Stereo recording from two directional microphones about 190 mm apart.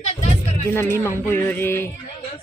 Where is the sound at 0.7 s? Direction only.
10° left (ahead or behind).